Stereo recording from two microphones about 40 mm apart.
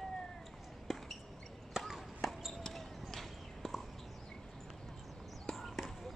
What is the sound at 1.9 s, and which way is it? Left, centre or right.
Chop, centre.